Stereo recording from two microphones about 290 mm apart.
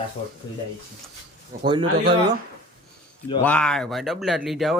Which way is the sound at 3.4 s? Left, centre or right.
Centre.